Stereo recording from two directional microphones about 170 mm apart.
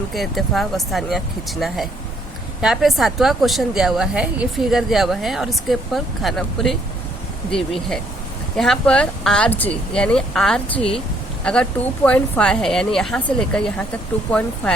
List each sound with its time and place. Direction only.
0.1 s a woman's voice: centre (ahead or behind)
10.8 s speech: 35° left (ahead or behind)
11.4 s a woman's voice: 5° left (ahead or behind)